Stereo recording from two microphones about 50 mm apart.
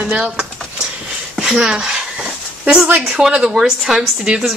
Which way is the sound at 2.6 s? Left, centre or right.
Right.